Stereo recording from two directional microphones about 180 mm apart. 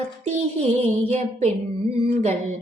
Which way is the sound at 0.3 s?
35° right (ahead or behind).